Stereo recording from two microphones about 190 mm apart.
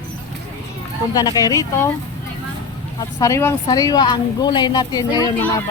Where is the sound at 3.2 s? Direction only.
15° left (ahead or behind).